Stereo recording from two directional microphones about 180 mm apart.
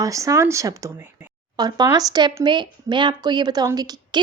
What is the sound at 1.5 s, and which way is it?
Speech, 20° right (ahead or behind).